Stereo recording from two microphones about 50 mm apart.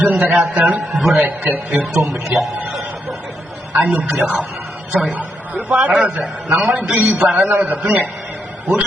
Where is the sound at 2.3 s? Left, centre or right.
Right.